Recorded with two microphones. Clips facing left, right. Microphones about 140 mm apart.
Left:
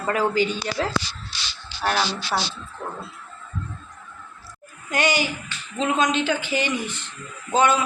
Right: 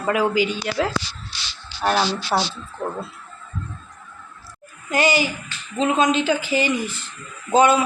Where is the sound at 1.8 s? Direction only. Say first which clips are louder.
Right 3 dB; 20° right (ahead or behind).